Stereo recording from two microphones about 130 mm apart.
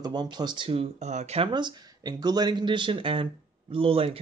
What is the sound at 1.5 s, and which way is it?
Speech, 35° right (ahead or behind).